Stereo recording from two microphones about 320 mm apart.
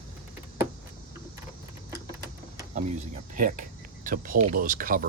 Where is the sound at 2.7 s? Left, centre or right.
Right.